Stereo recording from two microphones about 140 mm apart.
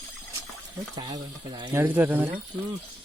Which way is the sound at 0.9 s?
30° right (ahead or behind).